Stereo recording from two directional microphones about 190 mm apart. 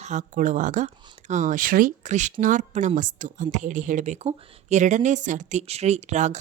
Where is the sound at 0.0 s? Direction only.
40° right (ahead or behind).